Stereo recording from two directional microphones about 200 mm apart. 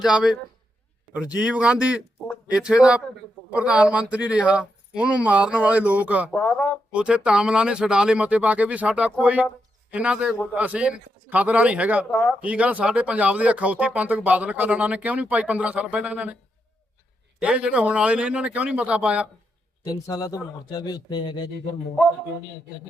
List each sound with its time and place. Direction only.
0.0 s speech: 5° right (ahead or behind)
6.3 s speech: 5° left (ahead or behind)
6.9 s speech: 5° right (ahead or behind)
17.4 s speech: 5° right (ahead or behind)
19.8 s a man's voice: 20° left (ahead or behind)